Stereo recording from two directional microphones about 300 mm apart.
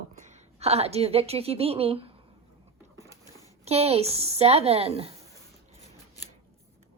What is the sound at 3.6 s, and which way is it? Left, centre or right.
Speech, right.